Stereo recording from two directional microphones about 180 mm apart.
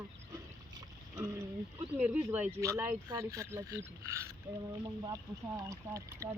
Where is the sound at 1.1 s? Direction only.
15° right (ahead or behind).